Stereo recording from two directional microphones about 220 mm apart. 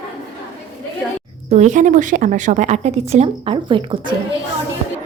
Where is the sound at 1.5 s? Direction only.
35° right (ahead or behind).